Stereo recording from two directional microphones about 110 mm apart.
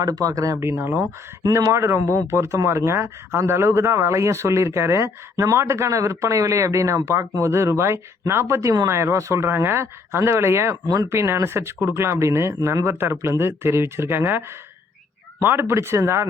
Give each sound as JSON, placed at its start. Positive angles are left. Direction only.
{"t": 0.0, "sound": "speech", "side_deg": -35}
{"t": 10.8, "sound": "speech", "side_deg": -35}
{"t": 11.1, "sound": "speech", "side_deg": -25}
{"t": 15.4, "sound": "speech", "side_deg": -20}